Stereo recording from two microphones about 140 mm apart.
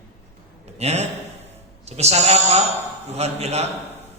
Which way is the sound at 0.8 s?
50° right (ahead or behind).